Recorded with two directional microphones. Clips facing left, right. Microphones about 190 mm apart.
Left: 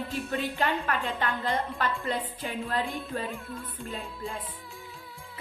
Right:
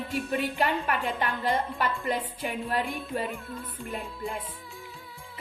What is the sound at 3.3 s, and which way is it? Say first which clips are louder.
Music: right 1 dB; centre (ahead or behind).